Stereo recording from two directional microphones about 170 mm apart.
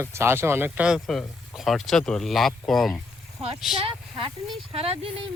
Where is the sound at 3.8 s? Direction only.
30° right (ahead or behind).